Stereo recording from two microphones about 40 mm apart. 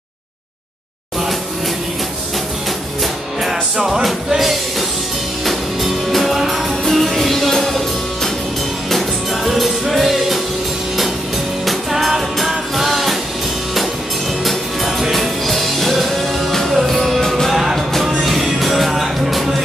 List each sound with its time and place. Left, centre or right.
3.8 s music: centre
11.6 s music: centre
14.9 s music: centre
17.2 s music: centre
17.5 s music: centre